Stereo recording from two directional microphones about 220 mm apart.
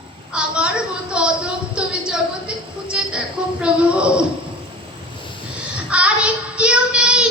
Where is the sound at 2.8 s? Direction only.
5° right (ahead or behind).